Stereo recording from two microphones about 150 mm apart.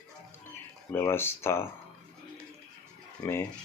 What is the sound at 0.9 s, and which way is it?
Speech, 15° left (ahead or behind).